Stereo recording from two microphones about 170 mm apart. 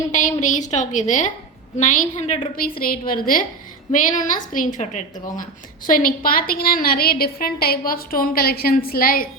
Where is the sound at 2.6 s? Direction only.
60° left (ahead or behind).